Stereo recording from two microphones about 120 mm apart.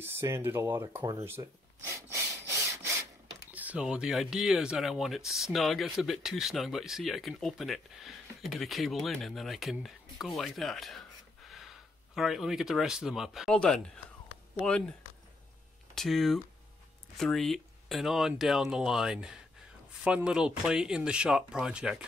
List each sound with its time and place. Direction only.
0.0 s speech: 20° right (ahead or behind)
1.4 s speech: 35° right (ahead or behind)
3.5 s speech: 10° right (ahead or behind)